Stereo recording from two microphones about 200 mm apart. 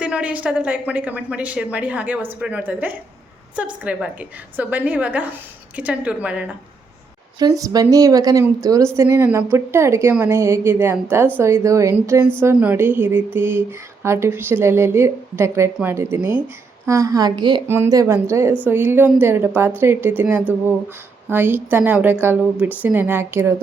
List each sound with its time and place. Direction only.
0.0 s speech: 5° right (ahead or behind)
7.3 s a woman's voice: 20° right (ahead or behind)